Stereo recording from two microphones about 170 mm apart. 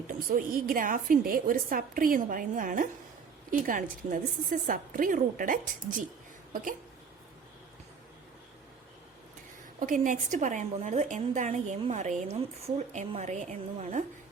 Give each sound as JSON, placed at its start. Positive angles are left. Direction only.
{"t": 0.1, "sound": "a woman's voice", "side_deg": -55}
{"t": 9.8, "sound": "a woman's voice", "side_deg": -50}